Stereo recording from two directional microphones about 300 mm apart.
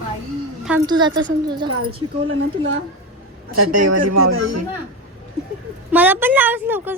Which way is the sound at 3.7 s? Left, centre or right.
Right.